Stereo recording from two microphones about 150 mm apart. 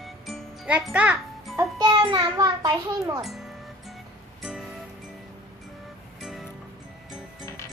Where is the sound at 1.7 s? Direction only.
30° right (ahead or behind).